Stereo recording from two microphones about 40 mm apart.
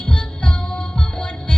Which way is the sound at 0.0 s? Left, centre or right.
Left.